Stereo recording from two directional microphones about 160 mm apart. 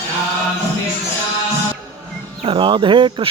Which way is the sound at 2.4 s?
35° right (ahead or behind).